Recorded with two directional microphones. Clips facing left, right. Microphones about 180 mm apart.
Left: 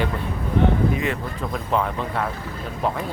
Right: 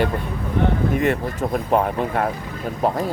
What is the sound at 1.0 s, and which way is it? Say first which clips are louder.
Speech: right 5 dB; 50° right (ahead or behind).